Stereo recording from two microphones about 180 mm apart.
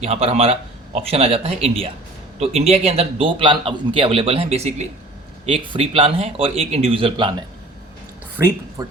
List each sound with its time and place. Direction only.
0.0 s a man's voice: 35° right (ahead or behind)
8.8 s a man's voice: 20° right (ahead or behind)